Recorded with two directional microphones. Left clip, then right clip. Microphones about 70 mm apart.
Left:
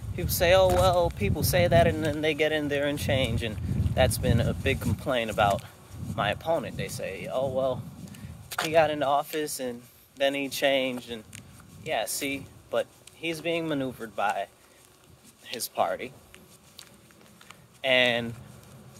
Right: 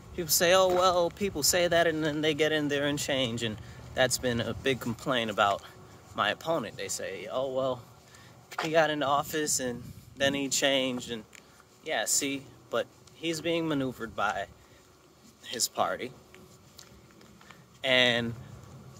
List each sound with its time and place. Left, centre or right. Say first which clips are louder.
0.1 s speech: left 2 dB; right
17.8 s speech: left 1 dB; right